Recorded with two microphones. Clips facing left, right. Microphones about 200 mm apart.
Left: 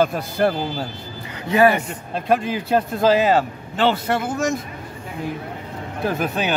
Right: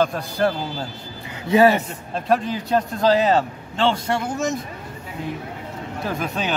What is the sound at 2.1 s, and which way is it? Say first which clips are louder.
A man's voice: left 1 dB; 5° left (ahead or behind).